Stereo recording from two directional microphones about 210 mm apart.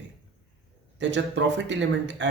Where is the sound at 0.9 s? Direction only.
60° right (ahead or behind).